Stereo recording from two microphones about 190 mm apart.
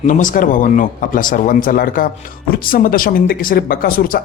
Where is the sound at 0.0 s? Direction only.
40° left (ahead or behind).